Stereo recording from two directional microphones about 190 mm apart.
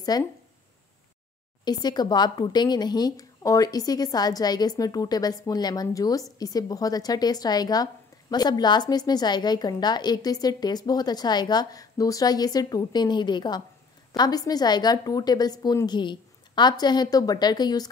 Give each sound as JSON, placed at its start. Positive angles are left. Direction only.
{"t": 0.1, "sound": "a woman's voice", "side_deg": 20}
{"t": 1.6, "sound": "a woman's voice", "side_deg": 20}